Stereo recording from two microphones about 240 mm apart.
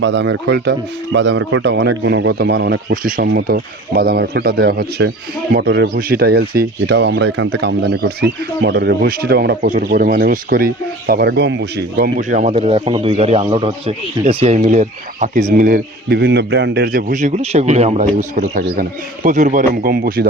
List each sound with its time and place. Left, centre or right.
0.0 s speech: right